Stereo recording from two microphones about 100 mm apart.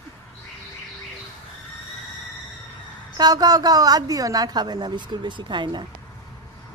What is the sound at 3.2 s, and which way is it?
A woman's voice, 40° right (ahead or behind).